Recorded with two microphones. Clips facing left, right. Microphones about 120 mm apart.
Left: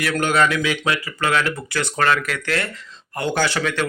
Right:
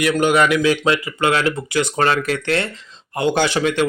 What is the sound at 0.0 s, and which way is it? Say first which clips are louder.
Speech: right 3 dB; 10° right (ahead or behind).